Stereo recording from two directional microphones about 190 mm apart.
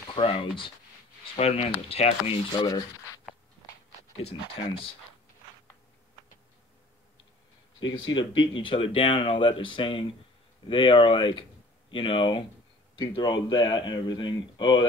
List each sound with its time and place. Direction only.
0.1 s speech: 30° left (ahead or behind)
4.3 s speech: 30° left (ahead or behind)
8.1 s speech: 25° left (ahead or behind)